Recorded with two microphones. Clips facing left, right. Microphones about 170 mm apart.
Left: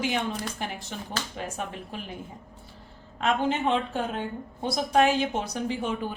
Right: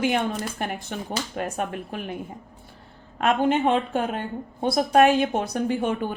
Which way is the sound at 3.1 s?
55° right (ahead or behind).